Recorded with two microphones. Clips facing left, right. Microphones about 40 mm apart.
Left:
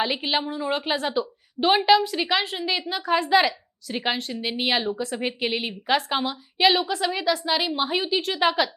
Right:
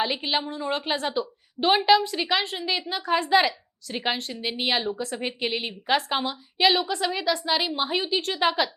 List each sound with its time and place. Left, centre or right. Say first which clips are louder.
0.0 s a woman's voice: left 1 dB; centre